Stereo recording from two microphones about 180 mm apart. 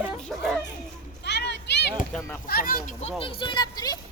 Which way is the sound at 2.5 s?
55° left (ahead or behind).